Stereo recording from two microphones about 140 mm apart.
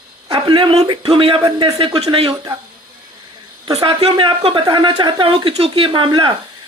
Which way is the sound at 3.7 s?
45° right (ahead or behind).